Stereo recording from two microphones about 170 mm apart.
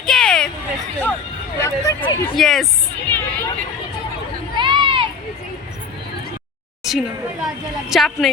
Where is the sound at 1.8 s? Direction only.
20° left (ahead or behind).